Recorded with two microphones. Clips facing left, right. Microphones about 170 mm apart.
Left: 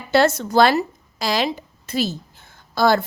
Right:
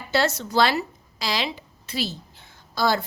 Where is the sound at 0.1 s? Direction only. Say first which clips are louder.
Left 6 dB; 55° left (ahead or behind).